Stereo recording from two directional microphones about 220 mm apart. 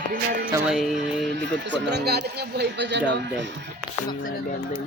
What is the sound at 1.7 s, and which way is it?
Speech, 50° right (ahead or behind).